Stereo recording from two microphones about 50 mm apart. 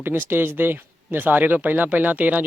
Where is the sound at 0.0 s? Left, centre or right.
Right.